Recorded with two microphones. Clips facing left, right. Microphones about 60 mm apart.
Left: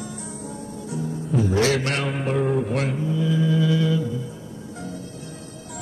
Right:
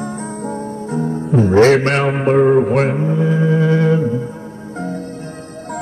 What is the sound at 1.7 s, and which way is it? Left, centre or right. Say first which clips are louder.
Mantra: right 9 dB; right.